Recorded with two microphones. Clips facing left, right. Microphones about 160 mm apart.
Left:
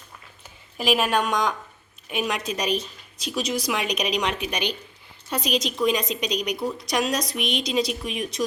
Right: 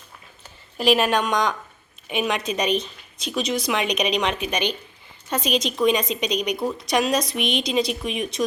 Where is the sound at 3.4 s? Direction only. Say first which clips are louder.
Right 2 dB; 55° right (ahead or behind).